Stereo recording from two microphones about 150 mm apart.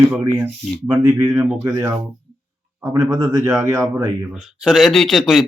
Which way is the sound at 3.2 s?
5° right (ahead or behind).